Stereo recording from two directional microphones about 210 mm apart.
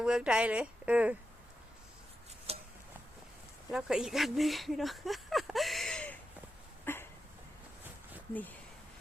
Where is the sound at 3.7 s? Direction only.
5° right (ahead or behind).